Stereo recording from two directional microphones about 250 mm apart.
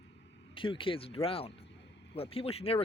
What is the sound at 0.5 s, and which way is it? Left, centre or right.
Speech, centre.